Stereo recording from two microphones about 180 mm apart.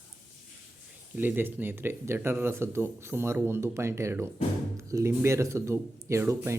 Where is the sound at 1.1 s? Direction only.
10° right (ahead or behind).